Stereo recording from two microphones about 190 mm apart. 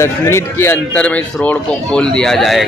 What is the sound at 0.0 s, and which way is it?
Speech, 15° left (ahead or behind).